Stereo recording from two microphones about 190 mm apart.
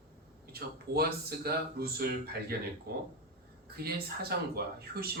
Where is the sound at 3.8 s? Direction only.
55° right (ahead or behind).